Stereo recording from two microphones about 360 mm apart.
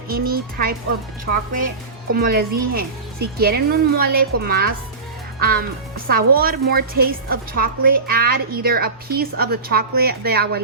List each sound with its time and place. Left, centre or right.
0.1 s a woman's voice: right